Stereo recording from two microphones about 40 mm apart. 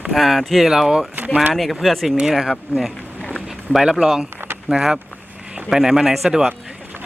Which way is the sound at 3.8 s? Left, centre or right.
Centre.